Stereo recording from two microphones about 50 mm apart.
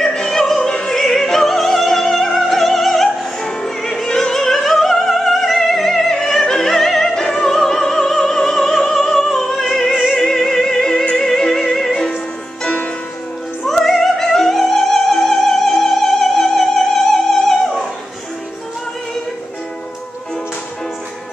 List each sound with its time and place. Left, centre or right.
0.0 s music: centre
13.7 s music: centre